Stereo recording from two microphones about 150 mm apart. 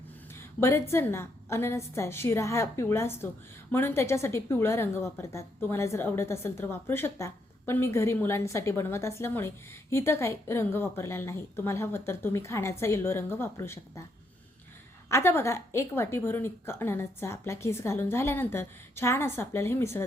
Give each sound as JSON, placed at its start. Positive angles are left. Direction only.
{"t": 0.3, "sound": "a woman's voice", "side_deg": 15}
{"t": 15.1, "sound": "a woman's voice", "side_deg": 15}